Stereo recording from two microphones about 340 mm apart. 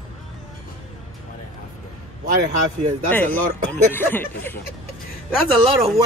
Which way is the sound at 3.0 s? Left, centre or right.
Centre.